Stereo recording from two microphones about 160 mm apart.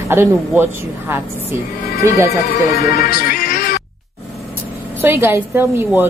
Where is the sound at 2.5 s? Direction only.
70° left (ahead or behind).